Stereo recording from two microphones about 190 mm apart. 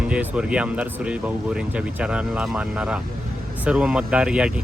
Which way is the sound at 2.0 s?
5° right (ahead or behind).